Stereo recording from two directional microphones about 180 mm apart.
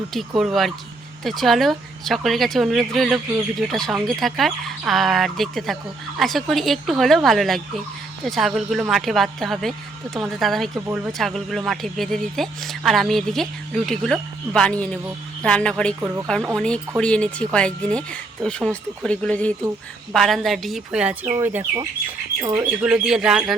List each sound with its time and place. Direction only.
0.1 s speech: centre (ahead or behind)
10.8 s speech: 10° right (ahead or behind)
11.2 s speech: centre (ahead or behind)